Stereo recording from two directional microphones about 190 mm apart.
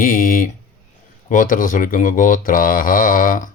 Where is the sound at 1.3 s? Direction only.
45° left (ahead or behind).